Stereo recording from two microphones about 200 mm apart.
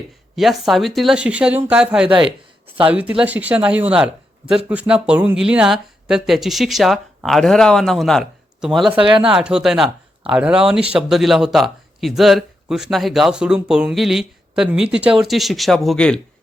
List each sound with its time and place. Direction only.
0.3 s speech: centre (ahead or behind)
2.0 s speech: 25° right (ahead or behind)
2.8 s speech: 5° right (ahead or behind)
9.0 s speech: 25° right (ahead or behind)
9.3 s speech: 5° right (ahead or behind)